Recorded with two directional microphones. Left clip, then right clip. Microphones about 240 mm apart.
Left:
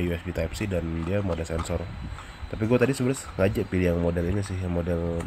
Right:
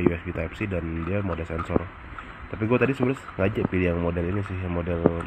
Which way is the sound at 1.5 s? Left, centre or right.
Left.